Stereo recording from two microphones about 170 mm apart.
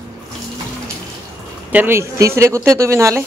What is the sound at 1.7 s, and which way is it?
Speech, 10° right (ahead or behind).